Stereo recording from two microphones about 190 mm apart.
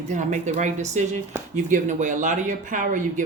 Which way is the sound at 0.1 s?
40° right (ahead or behind).